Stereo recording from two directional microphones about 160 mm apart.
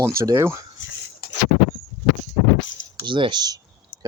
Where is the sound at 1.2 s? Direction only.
70° left (ahead or behind).